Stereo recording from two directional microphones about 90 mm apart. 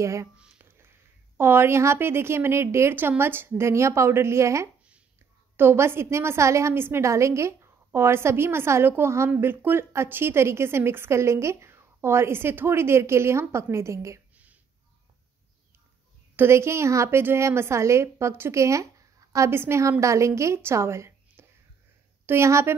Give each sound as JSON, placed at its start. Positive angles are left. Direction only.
{"t": 0.0, "sound": "a woman's voice", "side_deg": -35}
{"t": 0.4, "sound": "a woman's voice", "side_deg": -20}
{"t": 14.3, "sound": "a sound", "side_deg": -15}
{"t": 16.3, "sound": "a woman's voice", "side_deg": -30}